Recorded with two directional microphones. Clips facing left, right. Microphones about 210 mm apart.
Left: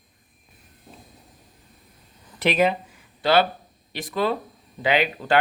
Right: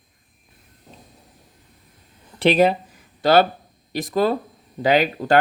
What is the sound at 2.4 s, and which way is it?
Speech, 35° right (ahead or behind).